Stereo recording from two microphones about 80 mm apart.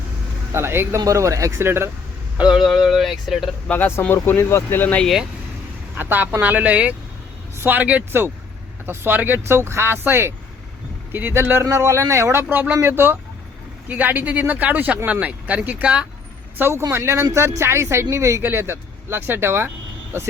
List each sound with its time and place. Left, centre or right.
0.5 s speech: right
0.9 s speech: right
2.6 s speech: centre
3.7 s speech: left
5.9 s speech: right
11.6 s speech: right
12.4 s speech: right
16.6 s speech: right